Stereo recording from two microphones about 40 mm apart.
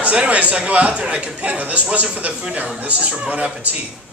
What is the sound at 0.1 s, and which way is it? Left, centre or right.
A man's voice, right.